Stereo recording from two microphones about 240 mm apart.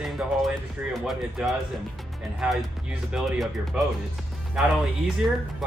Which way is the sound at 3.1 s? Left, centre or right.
Centre.